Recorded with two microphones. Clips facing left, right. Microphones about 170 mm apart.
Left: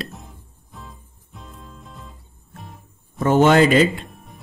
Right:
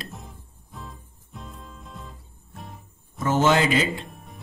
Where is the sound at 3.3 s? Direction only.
60° left (ahead or behind).